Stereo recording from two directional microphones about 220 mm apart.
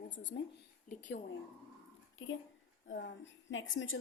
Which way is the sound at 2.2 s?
65° left (ahead or behind).